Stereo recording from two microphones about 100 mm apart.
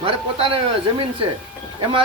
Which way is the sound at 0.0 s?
65° right (ahead or behind).